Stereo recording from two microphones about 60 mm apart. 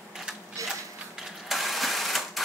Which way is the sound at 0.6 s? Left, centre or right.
Right.